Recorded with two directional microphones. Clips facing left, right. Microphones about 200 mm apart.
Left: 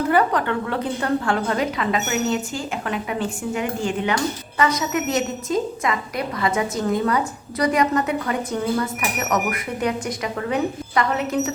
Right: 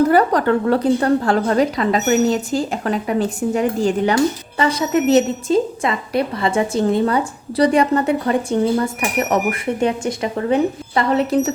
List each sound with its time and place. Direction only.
0.1 s a woman's voice: 40° right (ahead or behind)